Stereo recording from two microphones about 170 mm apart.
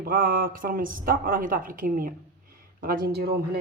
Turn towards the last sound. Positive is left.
turn(degrees=-65)  # may be behind; listen again after turning